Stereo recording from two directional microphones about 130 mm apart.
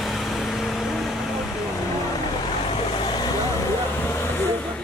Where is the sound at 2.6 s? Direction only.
40° left (ahead or behind).